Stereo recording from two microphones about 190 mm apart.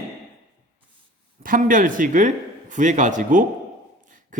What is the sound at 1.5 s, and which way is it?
A man's voice, 45° right (ahead or behind).